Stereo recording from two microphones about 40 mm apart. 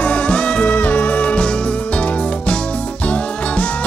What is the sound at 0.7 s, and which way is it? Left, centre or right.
Music, left.